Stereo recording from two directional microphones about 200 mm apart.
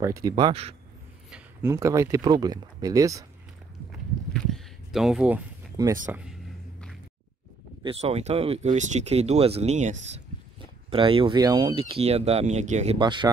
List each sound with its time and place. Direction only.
0.0 s speech: 15° right (ahead or behind)
1.3 s speech: 15° right (ahead or behind)
4.3 s a sound: centre (ahead or behind)
6.0 s speech: 5° right (ahead or behind)
7.8 s speech: 30° right (ahead or behind)
13.0 s speech: 25° right (ahead or behind)